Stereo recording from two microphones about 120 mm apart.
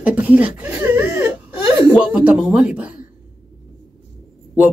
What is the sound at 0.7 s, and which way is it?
Laughter, 20° right (ahead or behind).